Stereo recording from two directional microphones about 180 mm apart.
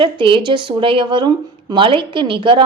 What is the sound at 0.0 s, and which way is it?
A woman's voice, 30° right (ahead or behind).